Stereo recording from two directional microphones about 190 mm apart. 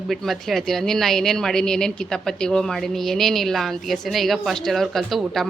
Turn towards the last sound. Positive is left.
turn(degrees=0)  # may be behind; listen again after turning